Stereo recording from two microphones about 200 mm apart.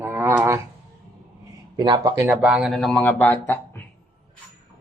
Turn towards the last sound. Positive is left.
turn(degrees=10)  # may be behind; listen again after turning